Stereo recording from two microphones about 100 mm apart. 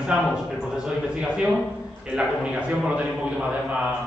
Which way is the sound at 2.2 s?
15° right (ahead or behind).